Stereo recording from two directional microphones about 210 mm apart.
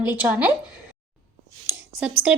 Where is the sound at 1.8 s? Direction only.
5° right (ahead or behind).